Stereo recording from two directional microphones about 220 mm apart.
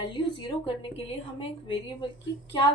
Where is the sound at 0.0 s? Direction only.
25° left (ahead or behind).